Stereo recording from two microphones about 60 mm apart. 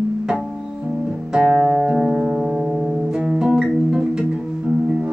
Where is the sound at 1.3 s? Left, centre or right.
Centre.